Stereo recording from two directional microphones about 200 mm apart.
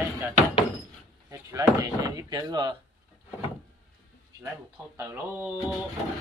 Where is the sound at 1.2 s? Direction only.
15° right (ahead or behind).